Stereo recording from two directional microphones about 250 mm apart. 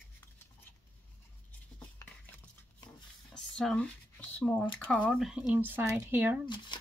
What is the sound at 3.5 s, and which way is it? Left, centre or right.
Speech, centre.